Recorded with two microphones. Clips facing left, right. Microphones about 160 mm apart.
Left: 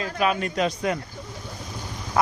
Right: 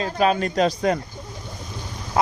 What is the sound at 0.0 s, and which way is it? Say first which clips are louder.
Speech: right 4 dB; 30° right (ahead or behind).